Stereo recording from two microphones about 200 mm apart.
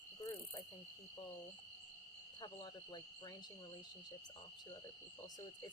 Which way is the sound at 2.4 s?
20° left (ahead or behind).